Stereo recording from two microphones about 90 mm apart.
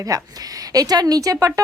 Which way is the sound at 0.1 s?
40° right (ahead or behind).